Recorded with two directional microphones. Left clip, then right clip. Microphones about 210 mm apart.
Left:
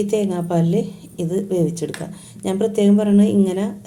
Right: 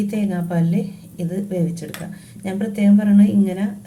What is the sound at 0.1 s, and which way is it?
A woman's voice, 30° left (ahead or behind).